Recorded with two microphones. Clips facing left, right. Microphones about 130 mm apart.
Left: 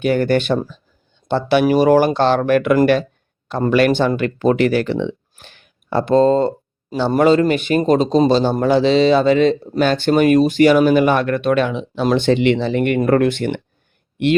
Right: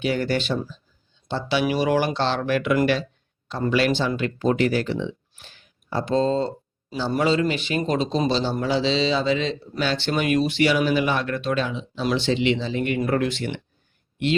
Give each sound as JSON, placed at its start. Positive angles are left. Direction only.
{"t": 0.0, "sound": "a man's voice", "side_deg": 50}
{"t": 12.0, "sound": "speech", "side_deg": 55}